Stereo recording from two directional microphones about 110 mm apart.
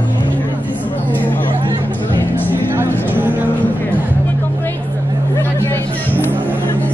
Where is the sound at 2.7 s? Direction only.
20° right (ahead or behind).